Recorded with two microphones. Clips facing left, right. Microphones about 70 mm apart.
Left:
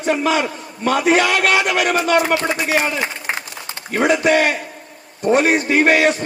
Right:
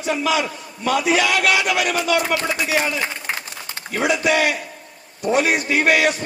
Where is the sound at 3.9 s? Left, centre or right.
Left.